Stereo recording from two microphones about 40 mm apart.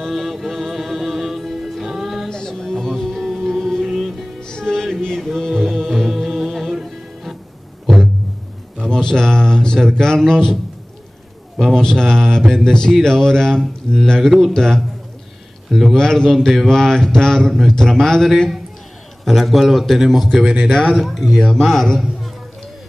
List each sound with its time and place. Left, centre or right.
0.1 s music: centre
2.2 s music: centre
3.8 s music: centre
4.4 s music: centre
8.8 s speech: centre
11.7 s speech: centre
14.2 s a man's voice: centre
14.5 s speech: centre
15.9 s a man's voice: centre